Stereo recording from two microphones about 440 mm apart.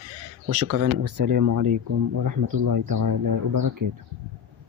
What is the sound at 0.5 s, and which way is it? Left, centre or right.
Speech, right.